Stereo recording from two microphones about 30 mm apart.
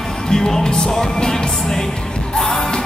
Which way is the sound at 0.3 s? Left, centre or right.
Centre.